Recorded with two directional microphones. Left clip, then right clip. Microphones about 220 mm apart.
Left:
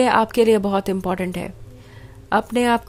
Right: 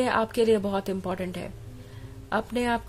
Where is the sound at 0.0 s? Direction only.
25° left (ahead or behind).